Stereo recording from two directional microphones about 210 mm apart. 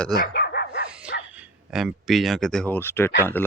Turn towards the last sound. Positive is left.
turn(degrees=10)  # may be behind; listen again after turning